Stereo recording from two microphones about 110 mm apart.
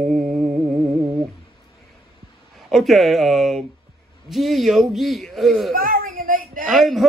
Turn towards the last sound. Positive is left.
turn(degrees=0)  # may be behind; listen again after turning